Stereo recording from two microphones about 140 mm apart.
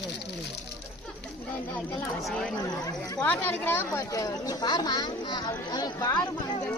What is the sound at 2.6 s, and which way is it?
Speech, 25° left (ahead or behind).